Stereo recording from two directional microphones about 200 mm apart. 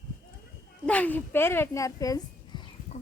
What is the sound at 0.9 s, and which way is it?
Speech, 5° left (ahead or behind).